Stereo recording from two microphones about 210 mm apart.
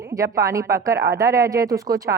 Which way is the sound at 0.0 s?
15° right (ahead or behind).